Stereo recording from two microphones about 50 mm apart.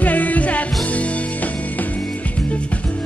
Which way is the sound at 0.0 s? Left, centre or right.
Left.